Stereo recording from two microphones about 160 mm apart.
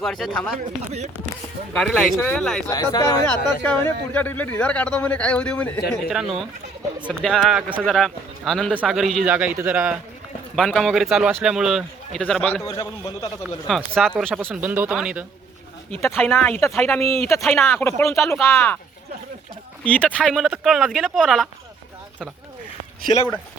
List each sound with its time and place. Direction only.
0.0 s speech: 5° left (ahead or behind)
0.6 s speech: 45° right (ahead or behind)
1.7 s speech: 5° left (ahead or behind)
2.6 s a man's voice: 20° left (ahead or behind)
3.6 s speech: 10° left (ahead or behind); by 9.9 s 10° right (ahead or behind)
10.5 s speech: centre (ahead or behind)
12.6 s a man's voice: 20° left (ahead or behind)
13.7 s speech: centre (ahead or behind)
14.3 s speech: 10° right (ahead or behind)
15.9 s speech: 15° left (ahead or behind)
16.8 s speech: centre (ahead or behind)
17.5 s a man's voice: 15° left (ahead or behind)
19.8 s speech: 10° left (ahead or behind)
23.0 s a man's voice: 20° left (ahead or behind)